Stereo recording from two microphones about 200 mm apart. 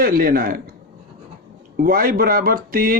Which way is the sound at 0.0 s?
45° right (ahead or behind).